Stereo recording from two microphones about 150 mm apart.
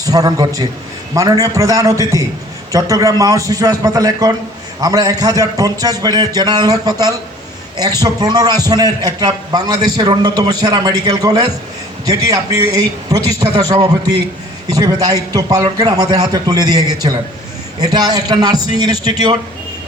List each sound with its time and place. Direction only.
0.0 s a man's voice: 25° right (ahead or behind)